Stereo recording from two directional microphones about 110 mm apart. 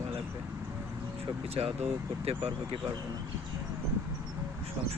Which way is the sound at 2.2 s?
55° right (ahead or behind).